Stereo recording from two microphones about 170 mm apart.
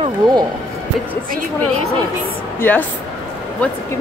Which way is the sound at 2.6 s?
10° left (ahead or behind).